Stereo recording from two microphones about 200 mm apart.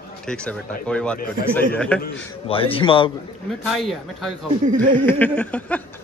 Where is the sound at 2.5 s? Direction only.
25° left (ahead or behind).